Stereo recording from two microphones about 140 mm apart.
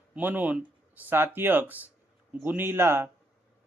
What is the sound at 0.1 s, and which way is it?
Speech, 15° right (ahead or behind).